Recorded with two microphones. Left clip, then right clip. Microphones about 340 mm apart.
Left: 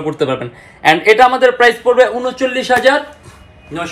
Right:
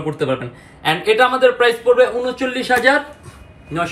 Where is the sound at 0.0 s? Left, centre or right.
Centre.